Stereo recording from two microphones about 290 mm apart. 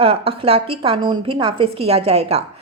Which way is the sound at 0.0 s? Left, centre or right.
Centre.